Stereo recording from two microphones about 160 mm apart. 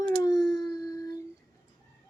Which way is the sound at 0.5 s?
25° left (ahead or behind).